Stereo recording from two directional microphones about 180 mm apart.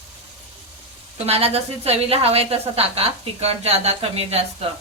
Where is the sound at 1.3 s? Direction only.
35° right (ahead or behind).